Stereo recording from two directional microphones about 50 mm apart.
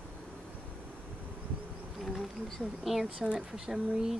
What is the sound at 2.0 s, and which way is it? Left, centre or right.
Bee, centre.